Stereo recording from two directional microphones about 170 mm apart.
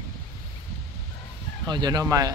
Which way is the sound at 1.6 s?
25° right (ahead or behind).